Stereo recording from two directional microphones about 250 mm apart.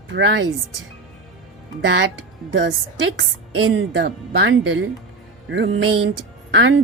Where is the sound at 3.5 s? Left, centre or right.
Right.